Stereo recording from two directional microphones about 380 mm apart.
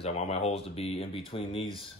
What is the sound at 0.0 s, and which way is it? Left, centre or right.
Speech, centre.